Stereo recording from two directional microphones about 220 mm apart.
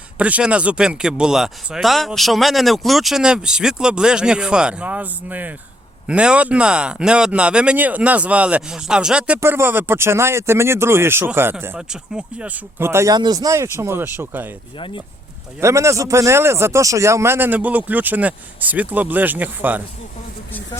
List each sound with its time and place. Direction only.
0.2 s speech: 5° right (ahead or behind)
14.8 s speech: 25° left (ahead or behind)
15.6 s speech: 15° right (ahead or behind)